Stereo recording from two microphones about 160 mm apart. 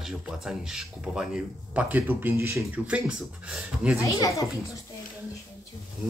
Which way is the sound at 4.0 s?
20° left (ahead or behind).